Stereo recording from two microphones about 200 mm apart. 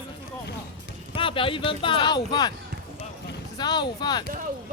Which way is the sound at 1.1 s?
25° left (ahead or behind).